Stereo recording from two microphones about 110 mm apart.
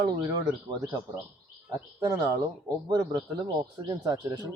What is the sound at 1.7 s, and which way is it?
Speech, 30° right (ahead or behind).